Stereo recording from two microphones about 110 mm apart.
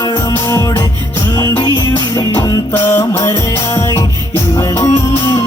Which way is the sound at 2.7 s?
20° left (ahead or behind).